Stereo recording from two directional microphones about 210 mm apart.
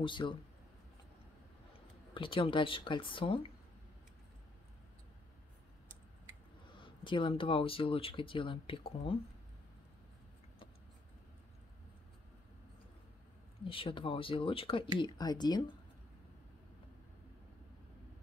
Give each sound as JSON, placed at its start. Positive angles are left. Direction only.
{"t": 0.0, "sound": "speech", "side_deg": 25}
{"t": 2.1, "sound": "speech", "side_deg": 25}
{"t": 7.0, "sound": "speech", "side_deg": 25}
{"t": 13.7, "sound": "speech", "side_deg": 25}